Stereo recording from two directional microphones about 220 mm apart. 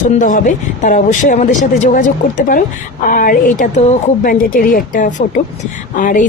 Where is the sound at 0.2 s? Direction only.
35° left (ahead or behind).